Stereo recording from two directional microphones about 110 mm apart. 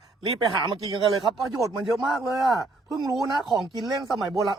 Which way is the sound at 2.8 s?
40° right (ahead or behind).